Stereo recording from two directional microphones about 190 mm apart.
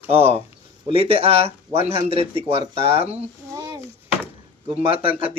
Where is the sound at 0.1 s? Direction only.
30° right (ahead or behind).